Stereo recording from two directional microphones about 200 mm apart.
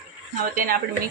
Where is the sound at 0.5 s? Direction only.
45° right (ahead or behind).